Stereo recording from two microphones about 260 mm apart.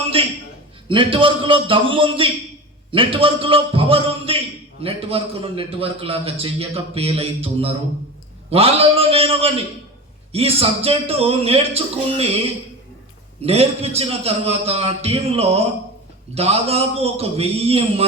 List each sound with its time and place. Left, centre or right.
0.9 s a man's voice: centre
13.4 s a man's voice: right